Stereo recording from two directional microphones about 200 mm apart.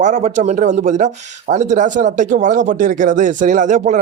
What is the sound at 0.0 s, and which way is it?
Speech, 35° right (ahead or behind).